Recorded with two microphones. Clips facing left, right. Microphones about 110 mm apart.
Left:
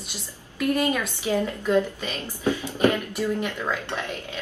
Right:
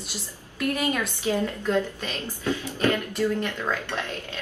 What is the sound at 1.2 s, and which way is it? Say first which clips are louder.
A woman's voice: left 1 dB; 15° left (ahead or behind).